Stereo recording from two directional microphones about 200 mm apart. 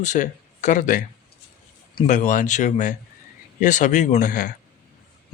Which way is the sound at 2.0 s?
40° left (ahead or behind).